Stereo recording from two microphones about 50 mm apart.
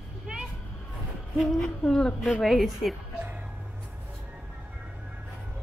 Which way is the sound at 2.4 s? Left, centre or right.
Centre.